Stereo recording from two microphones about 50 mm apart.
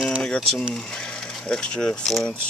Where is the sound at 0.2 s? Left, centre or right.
Centre.